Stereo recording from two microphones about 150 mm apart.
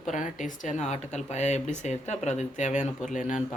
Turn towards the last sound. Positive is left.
turn(degrees=55)  # may be behind; listen again after turning